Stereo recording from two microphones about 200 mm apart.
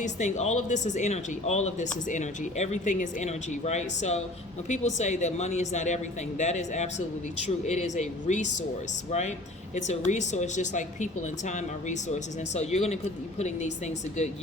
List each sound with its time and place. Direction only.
0.0 s speech: 35° left (ahead or behind)
10.1 s speech: 35° left (ahead or behind)